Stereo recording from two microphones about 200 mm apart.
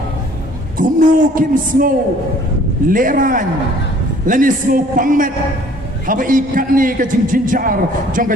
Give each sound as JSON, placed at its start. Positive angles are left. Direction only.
{"t": 0.8, "sound": "a man's voice", "side_deg": -45}